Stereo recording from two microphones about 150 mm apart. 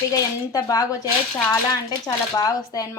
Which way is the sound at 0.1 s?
25° left (ahead or behind).